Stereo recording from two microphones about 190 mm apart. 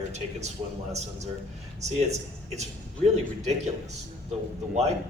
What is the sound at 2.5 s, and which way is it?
A man's voice, 35° right (ahead or behind).